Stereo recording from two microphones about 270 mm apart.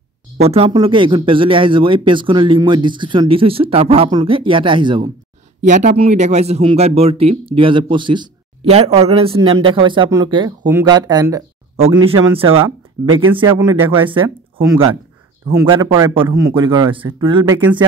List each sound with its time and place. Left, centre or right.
0.4 s a man's voice: right